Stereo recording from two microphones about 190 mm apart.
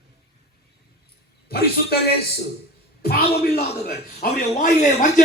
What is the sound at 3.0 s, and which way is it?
A man's voice, 55° left (ahead or behind).